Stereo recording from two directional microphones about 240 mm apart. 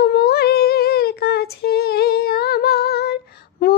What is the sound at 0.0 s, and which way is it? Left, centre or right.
Child singing, left.